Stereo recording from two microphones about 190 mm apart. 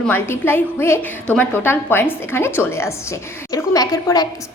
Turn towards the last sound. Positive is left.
turn(degrees=20)  # may be behind; listen again after turning